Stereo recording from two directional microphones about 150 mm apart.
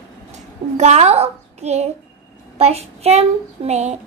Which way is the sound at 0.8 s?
50° right (ahead or behind).